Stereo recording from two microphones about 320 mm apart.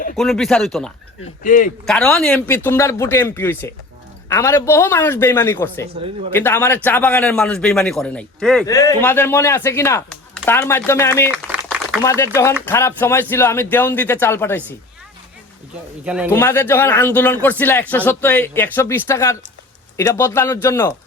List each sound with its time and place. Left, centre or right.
0.2 s speech: centre
1.5 s a man's voice: left
1.9 s speech: centre
11.3 s a sound: centre
12.0 s speech: centre
16.0 s speech: centre